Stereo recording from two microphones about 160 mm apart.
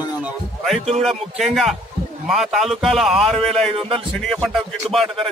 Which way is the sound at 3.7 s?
35° right (ahead or behind).